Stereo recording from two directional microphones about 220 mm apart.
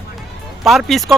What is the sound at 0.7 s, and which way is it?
Speech, centre (ahead or behind).